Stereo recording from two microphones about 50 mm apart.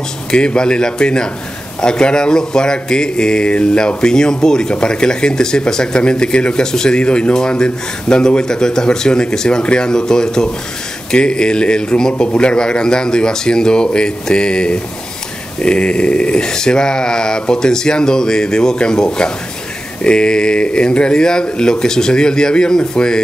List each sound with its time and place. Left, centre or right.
0.3 s speech: centre